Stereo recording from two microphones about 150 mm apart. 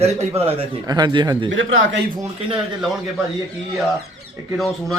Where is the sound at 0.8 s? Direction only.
25° right (ahead or behind).